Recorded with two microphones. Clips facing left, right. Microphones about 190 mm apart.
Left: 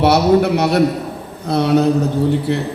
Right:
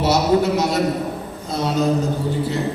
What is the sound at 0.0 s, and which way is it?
A man's voice, 65° left (ahead or behind).